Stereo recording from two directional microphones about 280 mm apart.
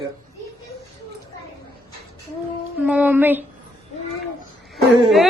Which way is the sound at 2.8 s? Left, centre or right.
Centre.